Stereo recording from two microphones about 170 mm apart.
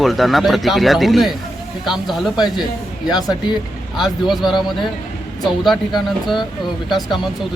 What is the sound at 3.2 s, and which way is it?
Speech, 25° left (ahead or behind).